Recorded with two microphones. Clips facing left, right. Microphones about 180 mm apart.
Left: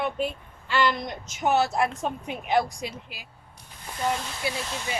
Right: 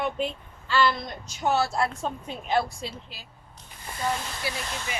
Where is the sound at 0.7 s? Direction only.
15° left (ahead or behind).